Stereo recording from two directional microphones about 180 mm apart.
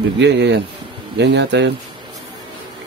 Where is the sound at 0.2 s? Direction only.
75° right (ahead or behind).